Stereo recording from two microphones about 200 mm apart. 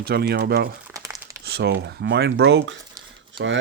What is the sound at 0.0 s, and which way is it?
Speech, 50° right (ahead or behind).